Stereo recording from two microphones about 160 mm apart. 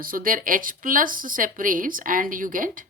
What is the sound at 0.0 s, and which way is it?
Speech, 65° right (ahead or behind).